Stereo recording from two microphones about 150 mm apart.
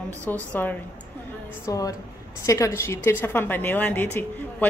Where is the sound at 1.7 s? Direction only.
25° left (ahead or behind).